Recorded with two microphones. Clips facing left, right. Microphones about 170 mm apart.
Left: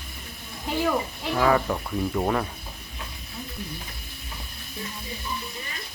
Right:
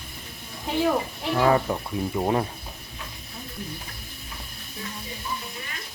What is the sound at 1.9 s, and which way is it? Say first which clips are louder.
Speech: left 1 dB; 10° right (ahead or behind).